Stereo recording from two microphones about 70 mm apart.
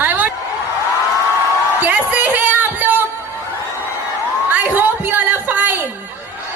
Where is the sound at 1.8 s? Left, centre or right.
Right.